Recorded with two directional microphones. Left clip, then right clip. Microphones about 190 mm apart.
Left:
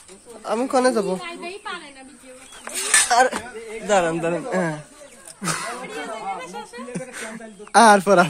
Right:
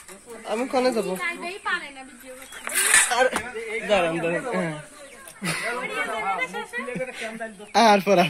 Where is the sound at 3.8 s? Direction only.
30° left (ahead or behind).